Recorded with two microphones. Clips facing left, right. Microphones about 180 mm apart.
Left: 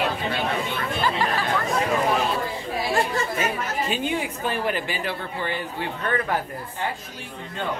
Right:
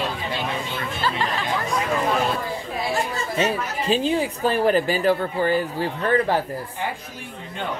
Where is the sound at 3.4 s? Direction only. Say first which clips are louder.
Right 3 dB; 30° right (ahead or behind).